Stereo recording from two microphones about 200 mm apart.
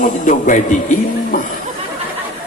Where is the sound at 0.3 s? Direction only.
40° left (ahead or behind).